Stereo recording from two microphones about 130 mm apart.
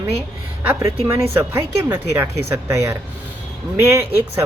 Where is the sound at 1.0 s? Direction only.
15° right (ahead or behind).